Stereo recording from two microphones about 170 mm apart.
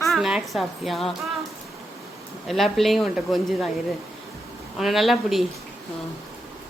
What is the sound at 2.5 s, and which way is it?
A woman's voice, centre (ahead or behind).